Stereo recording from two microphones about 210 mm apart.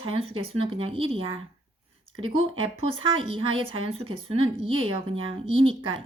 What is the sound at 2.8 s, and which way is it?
Speech, 25° right (ahead or behind).